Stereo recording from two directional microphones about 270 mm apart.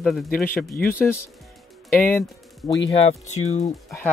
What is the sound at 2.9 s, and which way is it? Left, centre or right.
Speech, left.